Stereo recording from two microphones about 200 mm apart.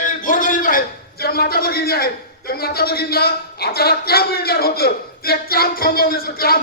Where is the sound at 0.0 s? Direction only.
40° left (ahead or behind).